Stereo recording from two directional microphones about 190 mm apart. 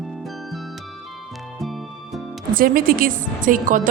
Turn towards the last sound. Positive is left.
turn(degrees=-45)  # may be behind; listen again after turning